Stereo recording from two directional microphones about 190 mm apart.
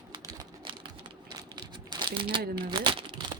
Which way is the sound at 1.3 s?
20° right (ahead or behind).